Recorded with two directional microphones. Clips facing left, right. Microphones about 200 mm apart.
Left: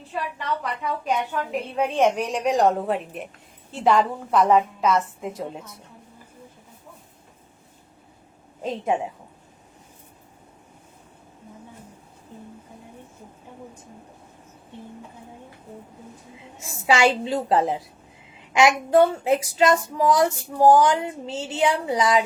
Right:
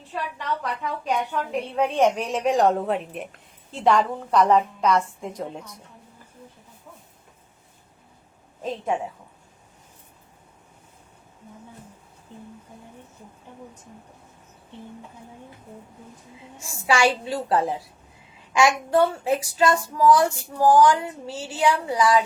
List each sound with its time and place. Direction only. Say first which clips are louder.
0.6 s a woman's voice: left 1 dB; centre (ahead or behind)
16.6 s child singing: left 2 dB; 20° left (ahead or behind)